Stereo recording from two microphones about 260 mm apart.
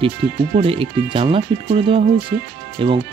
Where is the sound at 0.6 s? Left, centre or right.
Right.